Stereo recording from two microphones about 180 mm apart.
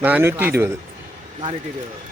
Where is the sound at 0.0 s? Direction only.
10° right (ahead or behind).